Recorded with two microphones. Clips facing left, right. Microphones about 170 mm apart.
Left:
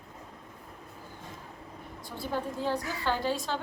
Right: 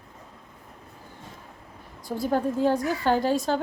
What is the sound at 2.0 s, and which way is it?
A woman's voice, 40° right (ahead or behind).